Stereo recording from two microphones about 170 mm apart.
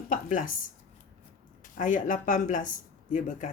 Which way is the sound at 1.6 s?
50° left (ahead or behind).